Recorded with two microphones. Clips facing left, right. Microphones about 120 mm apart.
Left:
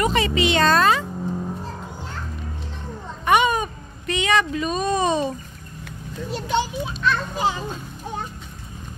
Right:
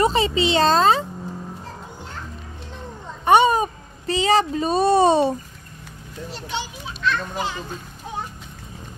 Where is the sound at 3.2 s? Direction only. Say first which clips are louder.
Right 3 dB; 30° right (ahead or behind).